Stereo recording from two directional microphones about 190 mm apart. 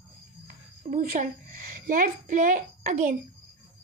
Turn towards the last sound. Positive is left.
turn(degrees=-40)  # may be behind; listen again after turning